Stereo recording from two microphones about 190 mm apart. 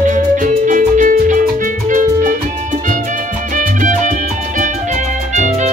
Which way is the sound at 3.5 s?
45° right (ahead or behind).